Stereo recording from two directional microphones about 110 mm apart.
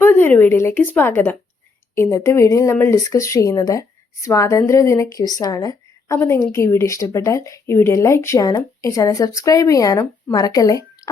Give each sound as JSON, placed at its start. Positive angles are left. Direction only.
{"t": 0.0, "sound": "speech", "side_deg": 20}
{"t": 6.1, "sound": "a woman's voice", "side_deg": 20}